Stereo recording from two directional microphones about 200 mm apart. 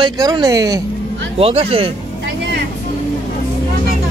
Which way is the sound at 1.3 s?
30° right (ahead or behind).